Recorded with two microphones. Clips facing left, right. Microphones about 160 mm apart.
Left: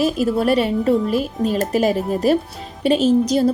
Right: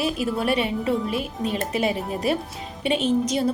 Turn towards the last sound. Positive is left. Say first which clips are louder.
# left 6 dB
turn(degrees=40)  # may be behind; listen again after turning